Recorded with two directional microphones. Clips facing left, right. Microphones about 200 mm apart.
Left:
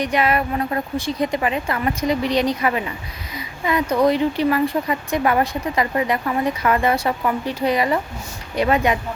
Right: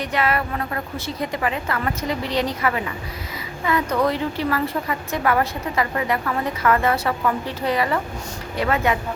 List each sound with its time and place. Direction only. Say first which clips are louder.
0.0 s a woman's voice: left 3 dB; 15° left (ahead or behind)